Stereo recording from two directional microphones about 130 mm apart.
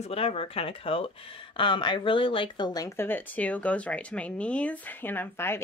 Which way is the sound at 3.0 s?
15° left (ahead or behind).